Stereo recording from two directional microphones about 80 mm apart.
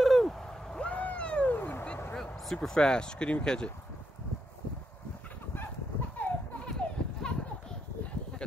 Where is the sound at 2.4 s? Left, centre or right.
Centre.